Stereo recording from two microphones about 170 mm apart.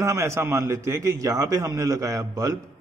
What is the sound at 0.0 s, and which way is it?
A man's voice, 15° right (ahead or behind).